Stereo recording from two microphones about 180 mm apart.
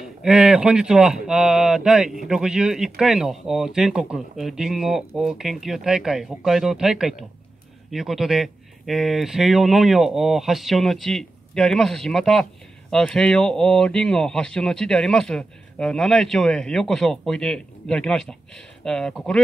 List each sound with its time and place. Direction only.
0.0 s speech: 5° right (ahead or behind)